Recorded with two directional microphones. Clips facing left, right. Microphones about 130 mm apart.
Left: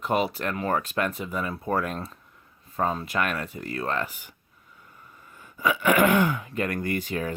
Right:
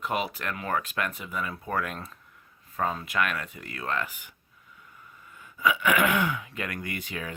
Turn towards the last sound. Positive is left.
turn(degrees=35)  # may be behind; listen again after turning